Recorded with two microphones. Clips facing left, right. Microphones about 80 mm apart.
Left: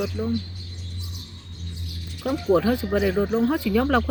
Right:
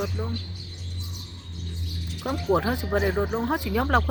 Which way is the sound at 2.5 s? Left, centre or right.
Right.